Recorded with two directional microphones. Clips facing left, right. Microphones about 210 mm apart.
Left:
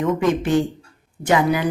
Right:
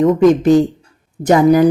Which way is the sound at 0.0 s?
40° right (ahead or behind).